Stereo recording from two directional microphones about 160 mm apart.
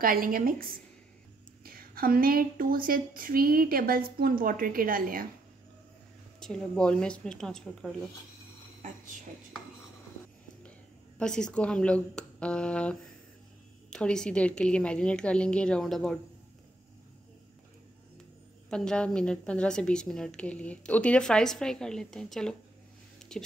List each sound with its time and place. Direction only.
0.0 s a woman's voice: 65° right (ahead or behind)
6.4 s a woman's voice: 5° left (ahead or behind)
11.1 s a woman's voice: 5° left (ahead or behind)
18.7 s a woman's voice: 5° left (ahead or behind)
23.1 s a sound: 5° left (ahead or behind)